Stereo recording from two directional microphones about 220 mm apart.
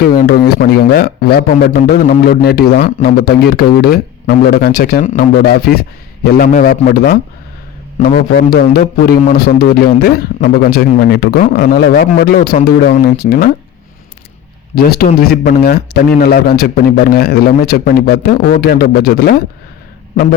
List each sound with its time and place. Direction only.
0.2 s a man's voice: 45° left (ahead or behind)
14.8 s a man's voice: 45° left (ahead or behind)